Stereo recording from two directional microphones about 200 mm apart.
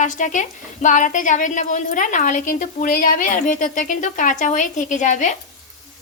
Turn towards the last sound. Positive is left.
turn(degrees=40)  # may be behind; listen again after turning